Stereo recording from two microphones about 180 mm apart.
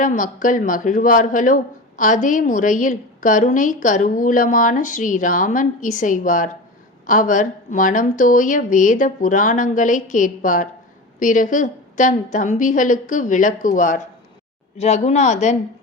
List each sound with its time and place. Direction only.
0.0 s speech: 45° left (ahead or behind)